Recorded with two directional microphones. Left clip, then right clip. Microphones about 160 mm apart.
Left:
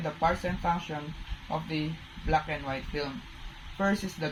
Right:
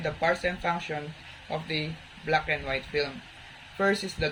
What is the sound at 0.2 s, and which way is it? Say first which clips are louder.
Speech: right 1 dB; 50° right (ahead or behind).